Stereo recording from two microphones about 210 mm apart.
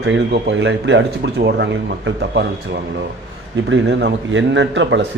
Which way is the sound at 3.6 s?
60° right (ahead or behind).